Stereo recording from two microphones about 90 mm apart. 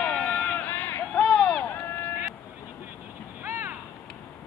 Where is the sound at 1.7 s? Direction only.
25° left (ahead or behind).